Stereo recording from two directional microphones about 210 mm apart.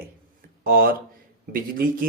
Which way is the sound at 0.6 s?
45° right (ahead or behind).